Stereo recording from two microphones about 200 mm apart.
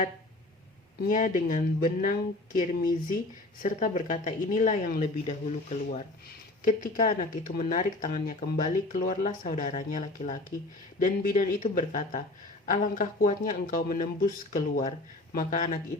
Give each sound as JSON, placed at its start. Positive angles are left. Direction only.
{"t": 1.0, "sound": "speech", "side_deg": 40}